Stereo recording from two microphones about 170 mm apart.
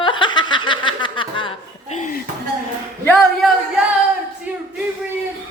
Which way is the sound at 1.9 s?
50° left (ahead or behind).